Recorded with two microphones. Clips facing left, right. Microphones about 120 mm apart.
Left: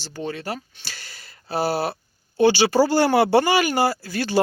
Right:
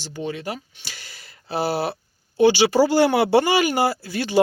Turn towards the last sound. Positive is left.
turn(degrees=-20)  # may be behind; listen again after turning